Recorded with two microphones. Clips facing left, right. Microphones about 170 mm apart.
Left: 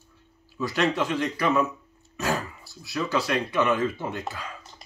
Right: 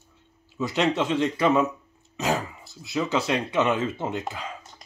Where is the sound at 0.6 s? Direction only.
25° right (ahead or behind).